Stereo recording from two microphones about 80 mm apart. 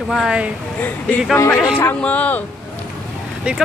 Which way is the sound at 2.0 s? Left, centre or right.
Centre.